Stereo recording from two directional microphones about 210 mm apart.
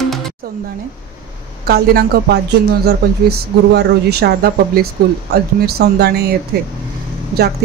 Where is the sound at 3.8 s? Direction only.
50° right (ahead or behind).